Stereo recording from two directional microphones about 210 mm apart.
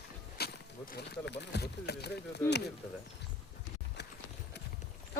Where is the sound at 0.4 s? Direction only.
50° left (ahead or behind).